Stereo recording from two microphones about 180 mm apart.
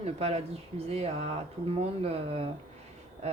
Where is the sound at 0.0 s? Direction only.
35° right (ahead or behind).